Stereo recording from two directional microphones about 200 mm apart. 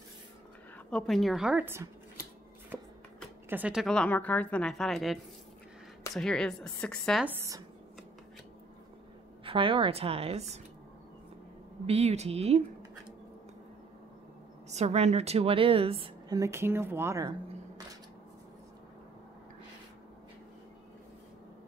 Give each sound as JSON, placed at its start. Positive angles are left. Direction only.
{"t": 0.8, "sound": "a woman's voice", "side_deg": 5}
{"t": 2.7, "sound": "shuffling cards", "side_deg": 5}
{"t": 3.4, "sound": "a woman's voice", "side_deg": -5}
{"t": 7.2, "sound": "speech", "side_deg": -15}
{"t": 9.4, "sound": "a woman's voice", "side_deg": -25}
{"t": 11.8, "sound": "speech", "side_deg": -30}
{"t": 14.7, "sound": "a woman's voice", "side_deg": -35}